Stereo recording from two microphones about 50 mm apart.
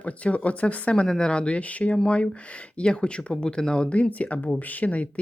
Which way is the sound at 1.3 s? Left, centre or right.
Left.